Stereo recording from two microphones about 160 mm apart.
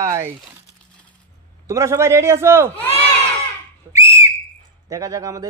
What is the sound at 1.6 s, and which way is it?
A man's voice, 20° right (ahead or behind).